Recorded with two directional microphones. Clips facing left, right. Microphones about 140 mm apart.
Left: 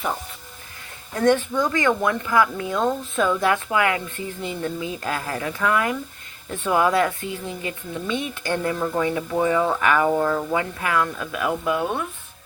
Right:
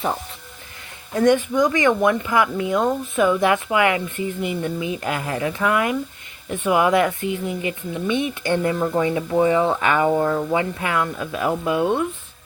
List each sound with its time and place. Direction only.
1.1 s speech: 15° right (ahead or behind)